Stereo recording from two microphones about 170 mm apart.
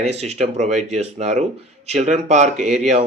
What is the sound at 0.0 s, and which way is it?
Speech, 40° right (ahead or behind).